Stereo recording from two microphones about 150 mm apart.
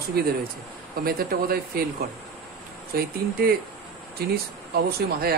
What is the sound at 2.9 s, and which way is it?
Speech, 90° right.